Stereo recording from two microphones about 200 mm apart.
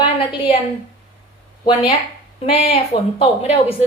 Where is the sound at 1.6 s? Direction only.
25° left (ahead or behind).